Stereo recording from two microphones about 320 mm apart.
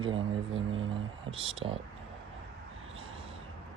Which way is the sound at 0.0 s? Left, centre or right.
Centre.